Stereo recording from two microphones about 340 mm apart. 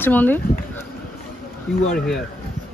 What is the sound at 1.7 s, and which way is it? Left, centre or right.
Speech, centre.